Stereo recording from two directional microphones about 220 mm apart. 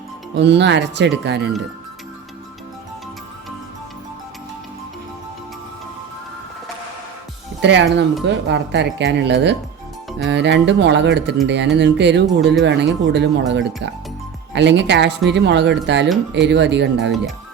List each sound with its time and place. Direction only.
0.3 s speech: 50° right (ahead or behind)
7.6 s speech: 50° right (ahead or behind)